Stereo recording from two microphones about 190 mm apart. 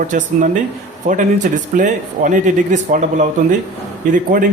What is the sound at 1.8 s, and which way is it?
A man's voice, 40° right (ahead or behind).